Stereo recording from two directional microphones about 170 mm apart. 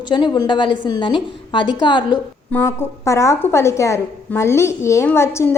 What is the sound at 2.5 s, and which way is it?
A woman's voice, 15° left (ahead or behind).